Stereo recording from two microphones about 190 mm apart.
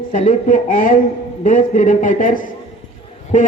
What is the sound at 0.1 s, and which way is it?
A man's voice, 40° left (ahead or behind).